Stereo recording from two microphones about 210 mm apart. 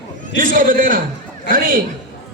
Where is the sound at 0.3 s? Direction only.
40° right (ahead or behind).